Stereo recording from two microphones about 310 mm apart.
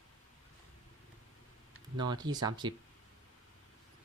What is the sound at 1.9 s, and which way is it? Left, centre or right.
Speech, centre.